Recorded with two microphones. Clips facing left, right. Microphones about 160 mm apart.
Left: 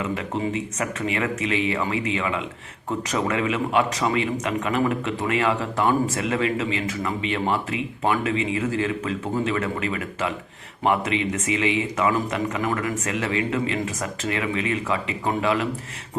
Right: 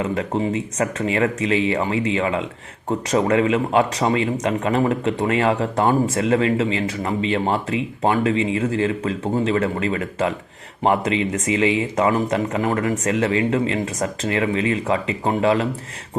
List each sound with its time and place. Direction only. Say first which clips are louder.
0.0 s speech: right 4 dB; 35° right (ahead or behind)